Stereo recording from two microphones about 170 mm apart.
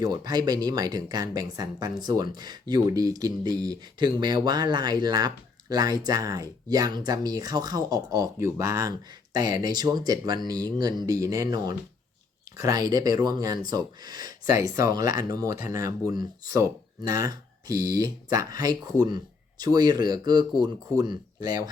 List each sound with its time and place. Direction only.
0.0 s speech: 25° right (ahead or behind)